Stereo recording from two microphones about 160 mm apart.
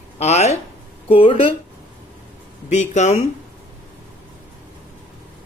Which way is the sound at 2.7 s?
45° left (ahead or behind).